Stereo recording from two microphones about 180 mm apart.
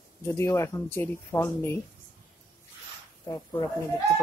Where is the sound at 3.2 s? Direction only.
20° left (ahead or behind).